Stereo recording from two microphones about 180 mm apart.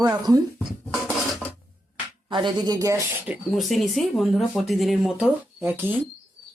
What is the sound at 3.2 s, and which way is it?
Speech, centre (ahead or behind).